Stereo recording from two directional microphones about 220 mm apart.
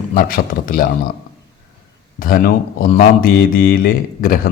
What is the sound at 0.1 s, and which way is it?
Speech, 40° left (ahead or behind).